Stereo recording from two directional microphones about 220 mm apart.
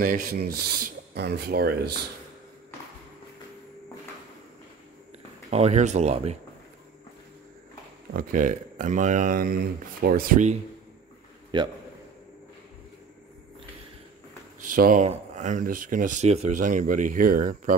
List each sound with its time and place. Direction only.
0.0 s speech: 40° right (ahead or behind)
5.5 s speech: 30° right (ahead or behind)
8.1 s speech: 40° right (ahead or behind)
11.5 s a man's voice: 20° right (ahead or behind)
14.7 s speech: 40° right (ahead or behind)